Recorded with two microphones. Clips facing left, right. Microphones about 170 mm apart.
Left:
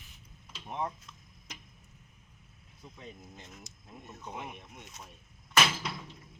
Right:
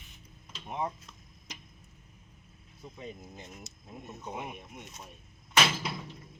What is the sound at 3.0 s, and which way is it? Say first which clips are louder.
Speech: right 5 dB; 15° right (ahead or behind).